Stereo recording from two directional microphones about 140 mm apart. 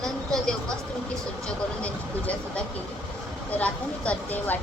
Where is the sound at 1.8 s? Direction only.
10° left (ahead or behind).